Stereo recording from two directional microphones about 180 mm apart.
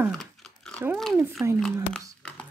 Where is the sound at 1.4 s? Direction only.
15° right (ahead or behind).